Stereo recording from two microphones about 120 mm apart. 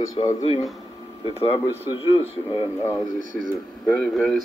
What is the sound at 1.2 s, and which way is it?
Speech, 45° left (ahead or behind).